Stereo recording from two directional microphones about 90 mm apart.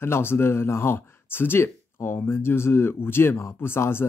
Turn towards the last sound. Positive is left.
turn(degrees=25)  # may be behind; listen again after turning